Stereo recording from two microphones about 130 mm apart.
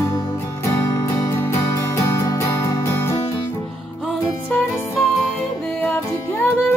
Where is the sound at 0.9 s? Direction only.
30° left (ahead or behind).